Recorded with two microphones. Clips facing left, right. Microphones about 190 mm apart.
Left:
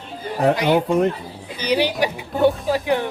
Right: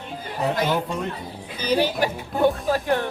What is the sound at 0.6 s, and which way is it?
Speech, 60° left (ahead or behind).